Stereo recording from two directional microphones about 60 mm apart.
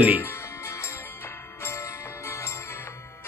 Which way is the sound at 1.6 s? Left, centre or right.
Left.